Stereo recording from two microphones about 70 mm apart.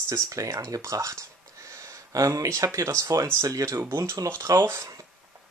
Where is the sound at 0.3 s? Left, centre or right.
Right.